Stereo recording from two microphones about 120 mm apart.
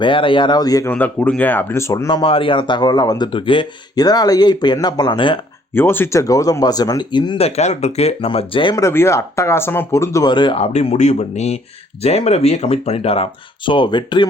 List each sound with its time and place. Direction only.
0.0 s speech: 45° left (ahead or behind)
0.9 s speech: 15° left (ahead or behind)
2.0 s speech: 45° left (ahead or behind)
5.7 s speech: 20° left (ahead or behind); by 7.3 s 40° left (ahead or behind)
7.3 s speech: 60° left (ahead or behind)
8.7 s speech: 20° left (ahead or behind)
10.2 s speech: 40° left (ahead or behind)
10.6 s speech: 65° left (ahead or behind)
13.7 s speech: 40° left (ahead or behind)